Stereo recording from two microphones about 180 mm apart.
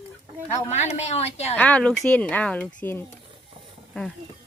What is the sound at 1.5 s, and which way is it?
Speech, 10° left (ahead or behind).